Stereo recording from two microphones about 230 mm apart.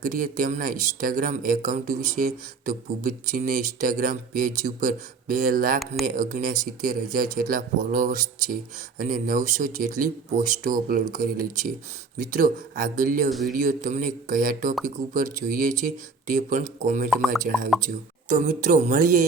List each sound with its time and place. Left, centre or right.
0.0 s speech: right
17.1 s speech: centre
17.8 s speech: right